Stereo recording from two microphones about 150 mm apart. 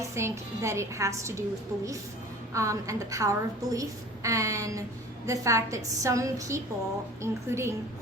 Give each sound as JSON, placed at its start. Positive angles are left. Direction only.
{"t": 0.0, "sound": "a woman's voice", "side_deg": -20}